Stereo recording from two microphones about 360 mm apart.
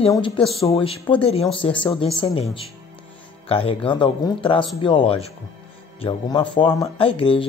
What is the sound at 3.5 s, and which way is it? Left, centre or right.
Speech, centre.